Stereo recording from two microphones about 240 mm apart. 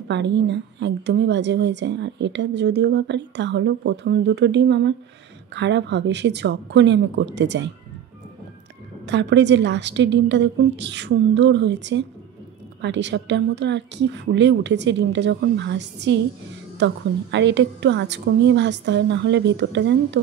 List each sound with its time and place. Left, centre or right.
0.1 s a woman's voice: right
9.0 s a woman's voice: right